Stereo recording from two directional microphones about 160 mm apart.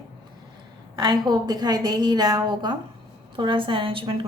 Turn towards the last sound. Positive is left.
turn(degrees=-35)  # may be behind; listen again after turning